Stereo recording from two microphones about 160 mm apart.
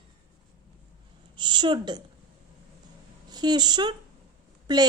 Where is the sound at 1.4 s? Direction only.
30° right (ahead or behind).